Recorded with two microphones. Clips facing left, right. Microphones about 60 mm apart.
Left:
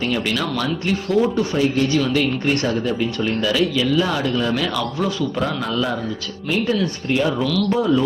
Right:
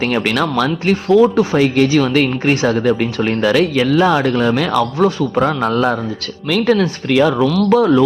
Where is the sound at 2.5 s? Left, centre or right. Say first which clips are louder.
Right 6 dB; right.